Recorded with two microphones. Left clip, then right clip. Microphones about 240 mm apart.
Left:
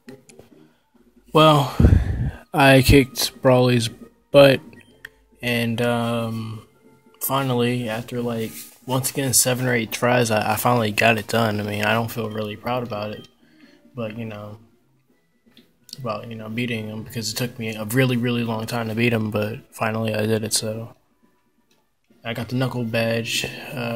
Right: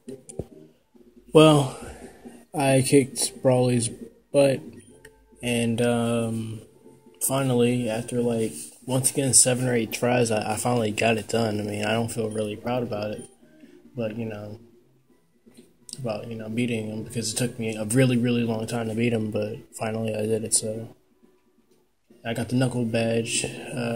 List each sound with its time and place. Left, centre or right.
1.3 s a man's voice: left
16.0 s a man's voice: left
22.2 s a man's voice: left